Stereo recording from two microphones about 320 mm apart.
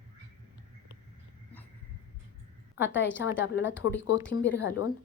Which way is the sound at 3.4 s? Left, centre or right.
Left.